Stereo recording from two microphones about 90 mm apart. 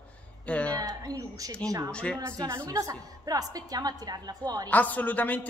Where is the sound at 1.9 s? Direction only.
10° left (ahead or behind).